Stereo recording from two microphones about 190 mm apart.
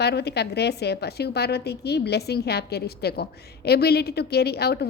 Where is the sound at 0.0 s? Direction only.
60° left (ahead or behind).